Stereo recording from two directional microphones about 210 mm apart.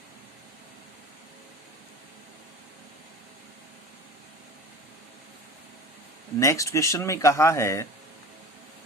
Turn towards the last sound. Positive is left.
turn(degrees=15)  # may be behind; listen again after turning